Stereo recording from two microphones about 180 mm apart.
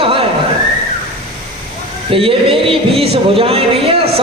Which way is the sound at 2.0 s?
30° right (ahead or behind).